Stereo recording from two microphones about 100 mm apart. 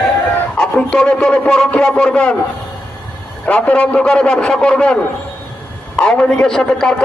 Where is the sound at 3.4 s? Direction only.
10° left (ahead or behind).